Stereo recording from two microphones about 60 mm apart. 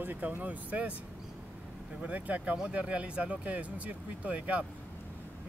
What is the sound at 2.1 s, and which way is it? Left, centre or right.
Speech, right.